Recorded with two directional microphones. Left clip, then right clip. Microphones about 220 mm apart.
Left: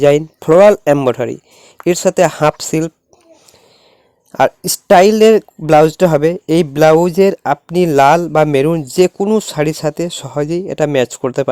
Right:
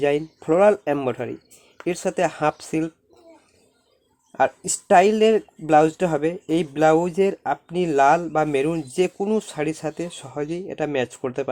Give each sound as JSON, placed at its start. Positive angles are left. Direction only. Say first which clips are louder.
{"t": 0.0, "sound": "speech", "louder": "left 11 dB", "side_deg": 45}
{"t": 4.3, "sound": "speech", "louder": "left 8 dB", "side_deg": 40}